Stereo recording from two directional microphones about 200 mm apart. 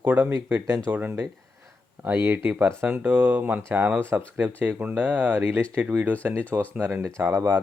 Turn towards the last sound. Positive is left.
turn(degrees=-10)  # may be behind; listen again after turning